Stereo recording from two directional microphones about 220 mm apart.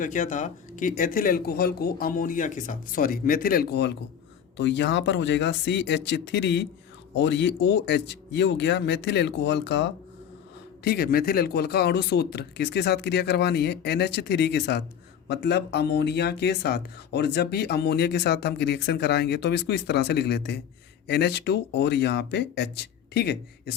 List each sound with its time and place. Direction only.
0.0 s speech: 35° left (ahead or behind)